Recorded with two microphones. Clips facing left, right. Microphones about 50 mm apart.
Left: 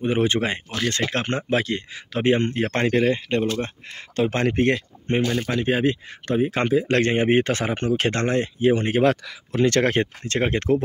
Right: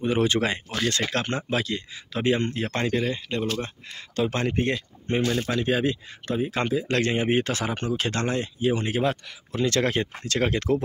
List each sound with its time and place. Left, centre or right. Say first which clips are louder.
0.0 s speech: left 1 dB; left
4.2 s speech: left 3 dB; left
4.5 s speech: left 5 dB; left
5.6 s speech: left 3 dB; left
10.3 s speech: left 2 dB; left